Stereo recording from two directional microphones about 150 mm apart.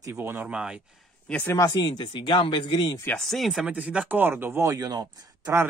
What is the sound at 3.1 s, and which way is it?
Speech, centre (ahead or behind).